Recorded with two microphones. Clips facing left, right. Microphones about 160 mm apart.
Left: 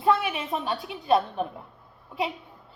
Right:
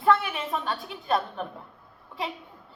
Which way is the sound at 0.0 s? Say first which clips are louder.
Even; 20° left (ahead or behind).